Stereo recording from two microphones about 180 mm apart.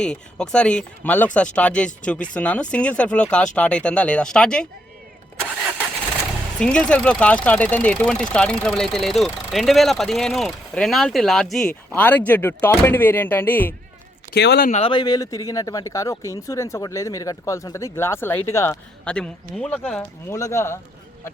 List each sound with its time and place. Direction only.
0.0 s speech: 5° left (ahead or behind)
6.6 s speech: 5° left (ahead or behind)
14.3 s speech: 65° left (ahead or behind)
14.7 s speech: 30° left (ahead or behind); by 20.7 s 15° left (ahead or behind)